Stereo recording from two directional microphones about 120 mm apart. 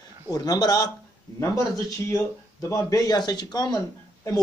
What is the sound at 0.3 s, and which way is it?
Speech, 30° left (ahead or behind).